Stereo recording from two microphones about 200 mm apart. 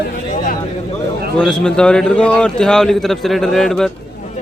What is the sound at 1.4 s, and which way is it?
A man's voice, 5° left (ahead or behind).